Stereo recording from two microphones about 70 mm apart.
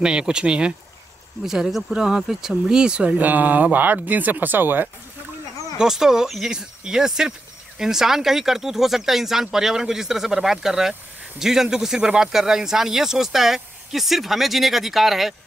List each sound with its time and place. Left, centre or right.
0.0 s speech: centre; by 4.8 s right
5.8 s speech: centre